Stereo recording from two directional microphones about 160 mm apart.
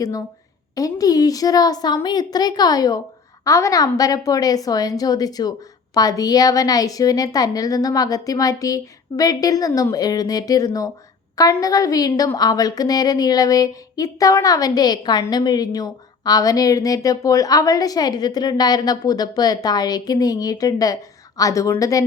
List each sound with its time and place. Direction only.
0.8 s a woman's voice: 20° left (ahead or behind)